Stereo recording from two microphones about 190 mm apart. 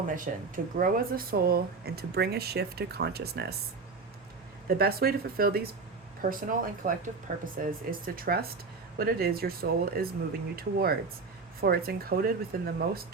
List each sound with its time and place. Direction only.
0.1 s speech: 45° right (ahead or behind)
4.7 s speech: 55° right (ahead or behind)